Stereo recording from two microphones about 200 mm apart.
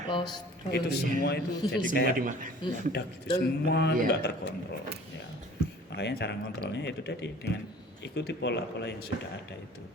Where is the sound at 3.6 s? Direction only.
60° left (ahead or behind).